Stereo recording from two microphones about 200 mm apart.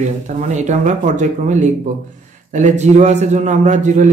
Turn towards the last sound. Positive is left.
turn(degrees=-35)  # may be behind; listen again after turning